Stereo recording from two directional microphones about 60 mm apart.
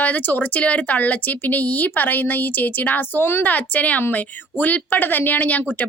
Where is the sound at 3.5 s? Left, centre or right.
Left.